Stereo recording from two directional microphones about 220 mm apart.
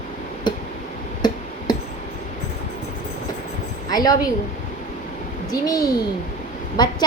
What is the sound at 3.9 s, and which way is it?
Speech, 15° left (ahead or behind).